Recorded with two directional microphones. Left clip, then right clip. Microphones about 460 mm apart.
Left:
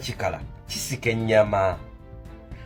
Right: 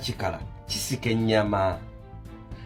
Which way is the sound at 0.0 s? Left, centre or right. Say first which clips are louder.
Left 2 dB; centre.